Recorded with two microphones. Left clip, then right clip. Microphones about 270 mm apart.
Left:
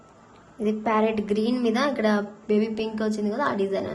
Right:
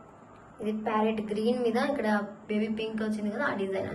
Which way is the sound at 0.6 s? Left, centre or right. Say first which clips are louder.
Left 6 dB; left.